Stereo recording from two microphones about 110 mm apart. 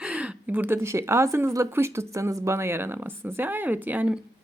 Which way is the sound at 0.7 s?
25° right (ahead or behind).